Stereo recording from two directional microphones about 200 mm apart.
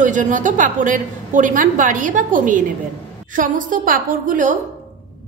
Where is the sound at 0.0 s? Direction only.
40° right (ahead or behind).